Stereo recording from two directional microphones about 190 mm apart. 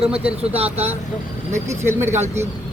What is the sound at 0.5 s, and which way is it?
Speech, 30° right (ahead or behind).